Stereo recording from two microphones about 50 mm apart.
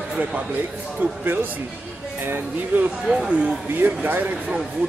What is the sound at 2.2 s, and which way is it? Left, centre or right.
Speech, right.